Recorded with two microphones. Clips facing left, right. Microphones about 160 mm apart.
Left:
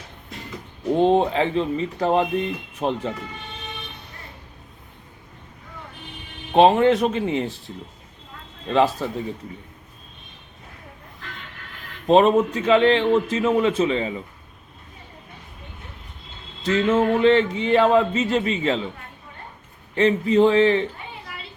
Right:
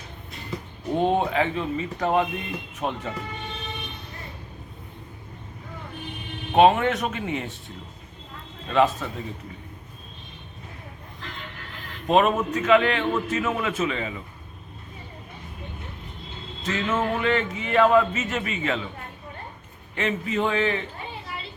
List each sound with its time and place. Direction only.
0.9 s speech: 30° left (ahead or behind)
6.6 s speech: 30° left (ahead or behind)
8.7 s speech: 35° left (ahead or behind)
12.0 s speech: 30° left (ahead or behind)
16.6 s speech: 30° left (ahead or behind)
20.0 s speech: 30° left (ahead or behind)